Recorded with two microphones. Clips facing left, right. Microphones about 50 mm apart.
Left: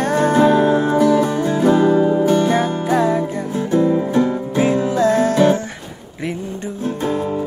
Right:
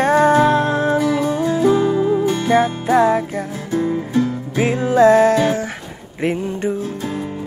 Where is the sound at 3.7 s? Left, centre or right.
Left.